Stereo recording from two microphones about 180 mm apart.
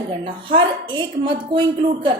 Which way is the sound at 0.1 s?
30° right (ahead or behind).